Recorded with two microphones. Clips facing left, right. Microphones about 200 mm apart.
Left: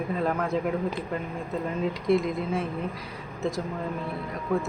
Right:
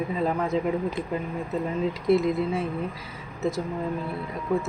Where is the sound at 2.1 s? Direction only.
5° right (ahead or behind).